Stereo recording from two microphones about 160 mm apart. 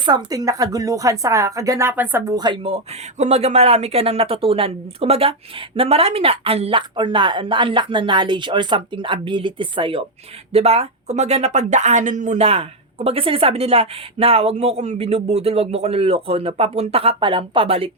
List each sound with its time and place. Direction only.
0.0 s speech: 25° right (ahead or behind)